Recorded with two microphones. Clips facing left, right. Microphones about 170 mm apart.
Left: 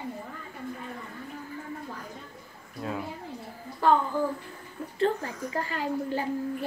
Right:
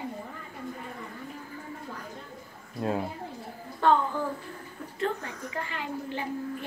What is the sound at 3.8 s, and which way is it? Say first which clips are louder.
Speech: even; 5° left (ahead or behind).